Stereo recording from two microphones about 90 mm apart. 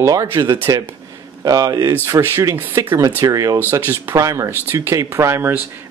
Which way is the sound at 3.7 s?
30° right (ahead or behind).